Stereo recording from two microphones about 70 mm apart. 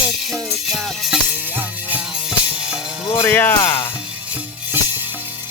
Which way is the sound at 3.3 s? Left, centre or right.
Left.